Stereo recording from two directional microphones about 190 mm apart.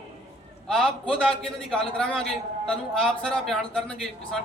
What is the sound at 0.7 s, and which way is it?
A man's voice, centre (ahead or behind).